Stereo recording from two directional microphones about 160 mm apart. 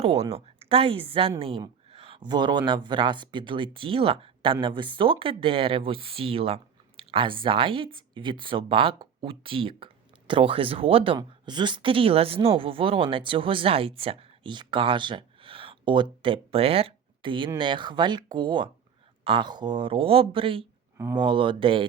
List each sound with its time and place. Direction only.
0.6 s speech: 35° right (ahead or behind)
21.0 s speech: 25° right (ahead or behind)